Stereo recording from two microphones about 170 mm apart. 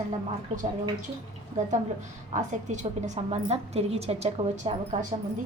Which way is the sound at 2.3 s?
45° right (ahead or behind).